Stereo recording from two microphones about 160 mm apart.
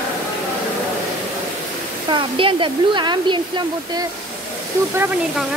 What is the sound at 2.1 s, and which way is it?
Speech, 30° right (ahead or behind).